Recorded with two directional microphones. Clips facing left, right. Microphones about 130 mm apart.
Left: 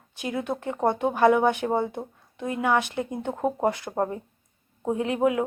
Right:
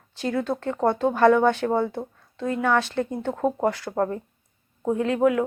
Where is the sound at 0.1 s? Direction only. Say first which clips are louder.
Right 3 dB; 15° left (ahead or behind).